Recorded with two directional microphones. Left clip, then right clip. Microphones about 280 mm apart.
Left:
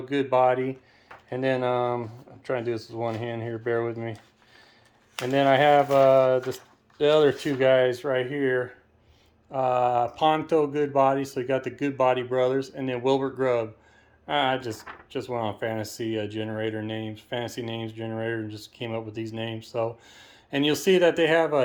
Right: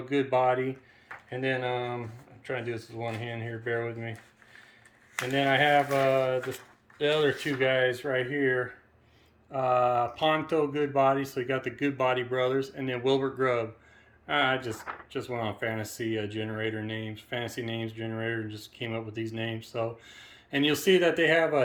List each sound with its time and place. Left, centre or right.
0.1 s speech: centre
5.2 s speech: centre